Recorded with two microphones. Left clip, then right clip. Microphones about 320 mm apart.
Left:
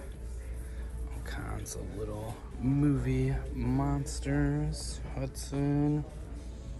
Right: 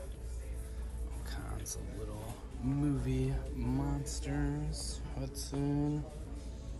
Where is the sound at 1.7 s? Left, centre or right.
Centre.